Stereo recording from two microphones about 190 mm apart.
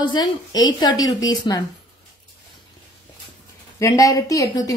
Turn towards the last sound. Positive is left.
turn(degrees=20)  # may be behind; listen again after turning